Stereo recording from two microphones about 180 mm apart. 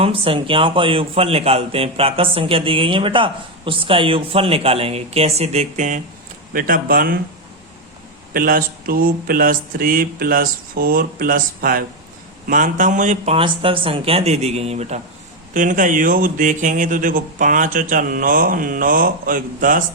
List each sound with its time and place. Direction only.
0.0 s speech: 30° right (ahead or behind); by 7.2 s 55° right (ahead or behind)
8.3 s speech: 55° right (ahead or behind)